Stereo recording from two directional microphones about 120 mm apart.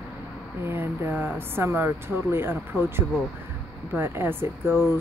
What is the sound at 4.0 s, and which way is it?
Speech, 20° right (ahead or behind).